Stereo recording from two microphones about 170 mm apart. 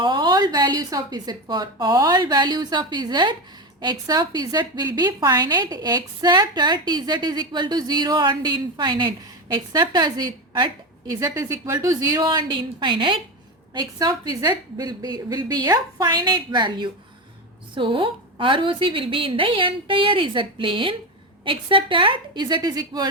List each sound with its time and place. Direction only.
0.0 s a woman's voice: 25° right (ahead or behind)